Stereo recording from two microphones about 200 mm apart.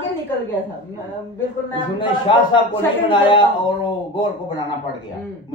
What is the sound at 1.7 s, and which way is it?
A man's voice, 25° left (ahead or behind).